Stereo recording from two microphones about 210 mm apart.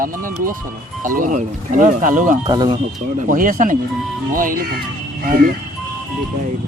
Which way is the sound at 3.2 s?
40° right (ahead or behind).